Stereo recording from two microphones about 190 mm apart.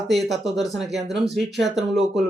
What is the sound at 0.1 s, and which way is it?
Speech, centre (ahead or behind).